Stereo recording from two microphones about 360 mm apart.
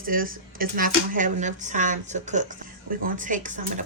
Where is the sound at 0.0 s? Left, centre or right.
Right.